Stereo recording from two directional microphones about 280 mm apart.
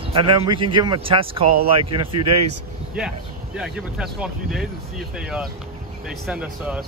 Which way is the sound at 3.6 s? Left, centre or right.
Centre.